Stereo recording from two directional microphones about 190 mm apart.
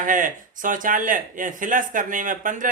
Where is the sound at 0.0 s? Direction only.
45° right (ahead or behind).